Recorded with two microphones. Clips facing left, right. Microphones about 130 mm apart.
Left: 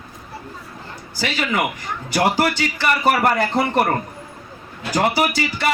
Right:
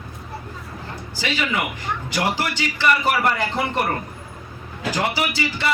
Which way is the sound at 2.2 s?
45° left (ahead or behind).